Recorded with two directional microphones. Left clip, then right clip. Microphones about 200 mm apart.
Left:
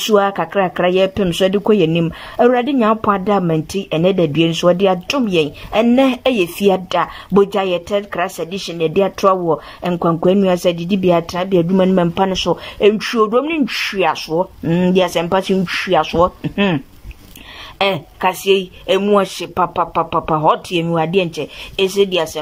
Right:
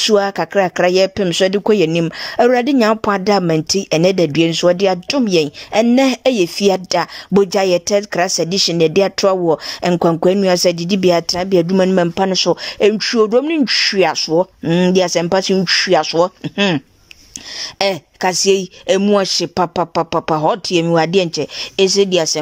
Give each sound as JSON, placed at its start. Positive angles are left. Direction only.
{"t": 0.0, "sound": "a woman's voice", "side_deg": -25}